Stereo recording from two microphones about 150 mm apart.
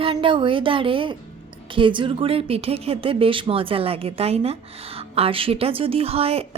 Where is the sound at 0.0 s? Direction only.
35° right (ahead or behind).